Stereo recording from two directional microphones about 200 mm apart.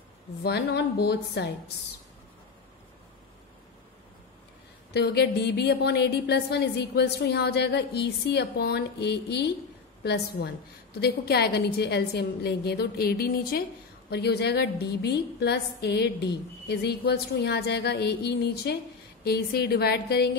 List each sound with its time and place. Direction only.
0.4 s a woman's voice: 55° left (ahead or behind)
4.9 s a woman's voice: 55° left (ahead or behind)